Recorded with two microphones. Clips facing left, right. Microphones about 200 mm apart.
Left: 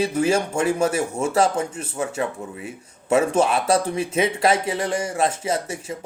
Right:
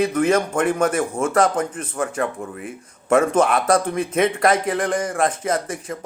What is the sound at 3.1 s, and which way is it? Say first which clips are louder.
A man's voice: right 2 dB; 25° left (ahead or behind).